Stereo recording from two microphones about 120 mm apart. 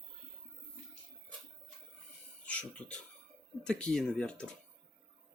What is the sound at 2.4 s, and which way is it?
Speech, 10° left (ahead or behind).